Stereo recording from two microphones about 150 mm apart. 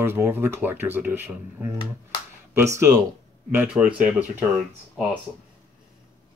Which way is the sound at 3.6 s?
5° right (ahead or behind).